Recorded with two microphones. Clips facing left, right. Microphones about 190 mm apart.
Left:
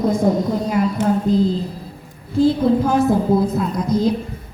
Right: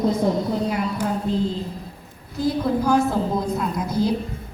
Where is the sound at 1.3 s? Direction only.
40° left (ahead or behind).